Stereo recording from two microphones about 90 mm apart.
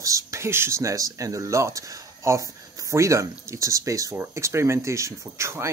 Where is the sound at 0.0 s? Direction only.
35° right (ahead or behind).